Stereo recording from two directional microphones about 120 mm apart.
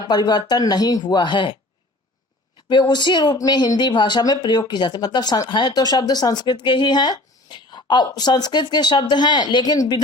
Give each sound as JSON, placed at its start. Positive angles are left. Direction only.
{"t": 0.1, "sound": "speech", "side_deg": 35}
{"t": 2.6, "sound": "speech", "side_deg": 40}